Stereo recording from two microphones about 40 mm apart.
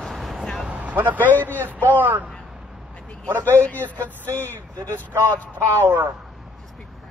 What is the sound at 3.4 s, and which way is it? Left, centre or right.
A man's voice, left.